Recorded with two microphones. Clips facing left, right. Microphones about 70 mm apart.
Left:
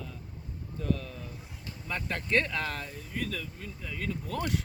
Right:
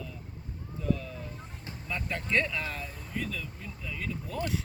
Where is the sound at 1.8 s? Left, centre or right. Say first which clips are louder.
Left 1 dB; left.